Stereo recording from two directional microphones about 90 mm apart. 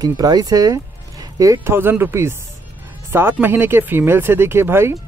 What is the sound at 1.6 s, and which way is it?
Speech, 25° right (ahead or behind).